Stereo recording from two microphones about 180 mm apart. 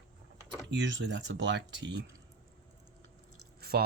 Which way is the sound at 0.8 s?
80° right.